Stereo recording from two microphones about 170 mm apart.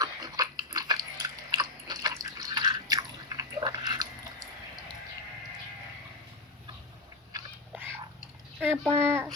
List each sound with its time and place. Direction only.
0.0 s dog: 20° right (ahead or behind)
8.5 s a sound: centre (ahead or behind)
8.9 s speech: 15° right (ahead or behind)